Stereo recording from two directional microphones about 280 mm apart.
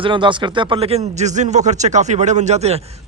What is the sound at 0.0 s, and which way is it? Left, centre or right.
Speech, centre.